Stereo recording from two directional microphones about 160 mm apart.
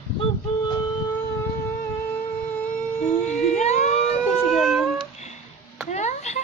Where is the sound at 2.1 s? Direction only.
10° left (ahead or behind).